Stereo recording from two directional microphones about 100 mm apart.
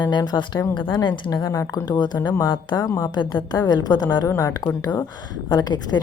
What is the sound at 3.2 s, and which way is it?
Speech, 50° left (ahead or behind).